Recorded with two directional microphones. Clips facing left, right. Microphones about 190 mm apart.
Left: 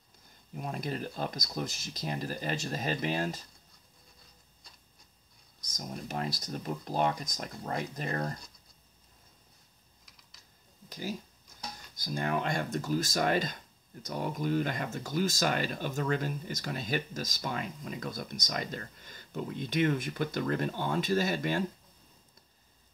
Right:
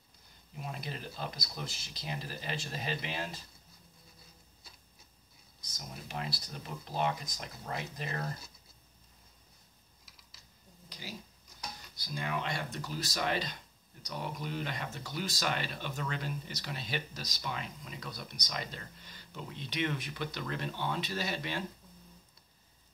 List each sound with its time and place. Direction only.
0.6 s speech: 45° left (ahead or behind)
4.6 s a sound: 5° right (ahead or behind)
5.6 s speech: 45° left (ahead or behind)
10.0 s typing: 5° right (ahead or behind)
10.9 s speech: 45° left (ahead or behind)